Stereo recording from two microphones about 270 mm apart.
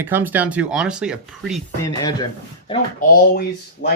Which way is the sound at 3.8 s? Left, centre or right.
Left.